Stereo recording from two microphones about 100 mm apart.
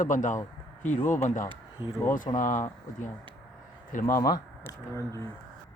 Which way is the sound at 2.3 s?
80° left.